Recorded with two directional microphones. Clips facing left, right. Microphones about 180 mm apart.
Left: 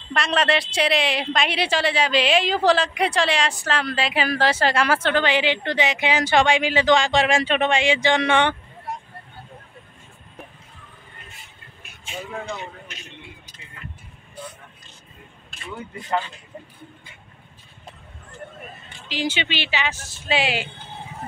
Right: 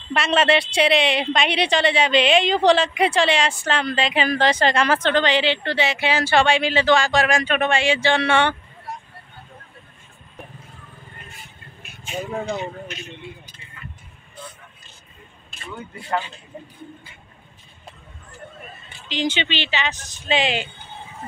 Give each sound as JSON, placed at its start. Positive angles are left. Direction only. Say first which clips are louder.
{"t": 0.1, "sound": "a woman's voice", "louder": "right 3 dB", "side_deg": -5}
{"t": 12.1, "sound": "speech", "louder": "right 5 dB", "side_deg": -35}
{"t": 19.0, "sound": "speech", "louder": "right 2 dB", "side_deg": 5}